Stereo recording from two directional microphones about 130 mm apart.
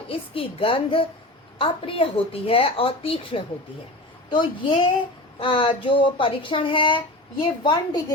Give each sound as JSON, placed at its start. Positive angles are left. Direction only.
{"t": 0.1, "sound": "a woman's voice", "side_deg": 45}